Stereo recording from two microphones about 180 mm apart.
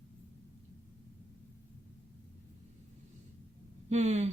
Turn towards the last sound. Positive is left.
turn(degrees=-40)  # may be behind; listen again after turning